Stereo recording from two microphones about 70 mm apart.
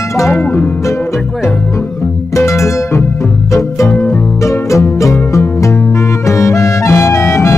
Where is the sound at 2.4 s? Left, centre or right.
Left.